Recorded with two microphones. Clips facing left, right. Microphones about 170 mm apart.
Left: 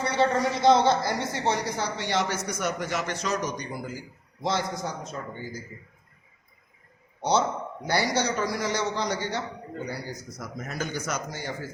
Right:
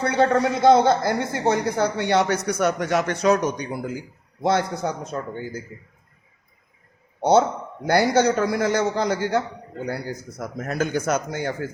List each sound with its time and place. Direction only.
0.0 s speech: 55° right (ahead or behind)
7.2 s a man's voice: 55° right (ahead or behind)